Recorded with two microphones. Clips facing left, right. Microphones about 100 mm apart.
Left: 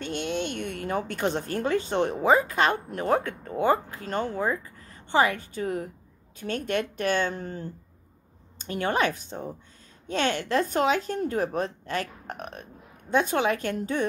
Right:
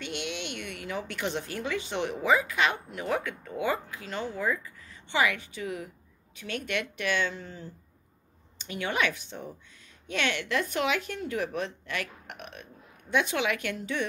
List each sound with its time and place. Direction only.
0.0 s speech: 40° left (ahead or behind)